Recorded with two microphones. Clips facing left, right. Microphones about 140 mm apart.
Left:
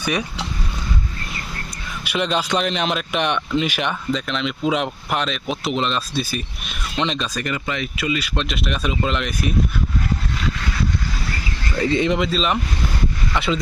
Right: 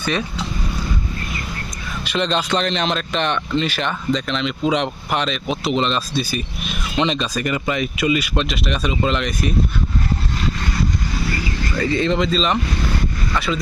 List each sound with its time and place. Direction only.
0.0 s speech: 15° left (ahead or behind)
2.0 s speech: 10° left (ahead or behind)
4.1 s speech: centre (ahead or behind)
7.4 s speech: 15° right (ahead or behind)
8.4 s speech: centre (ahead or behind)
11.8 s speech: 20° left (ahead or behind)
13.3 s speech: 25° left (ahead or behind)